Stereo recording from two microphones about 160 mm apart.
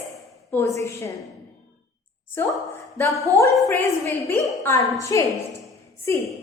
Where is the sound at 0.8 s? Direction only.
15° left (ahead or behind).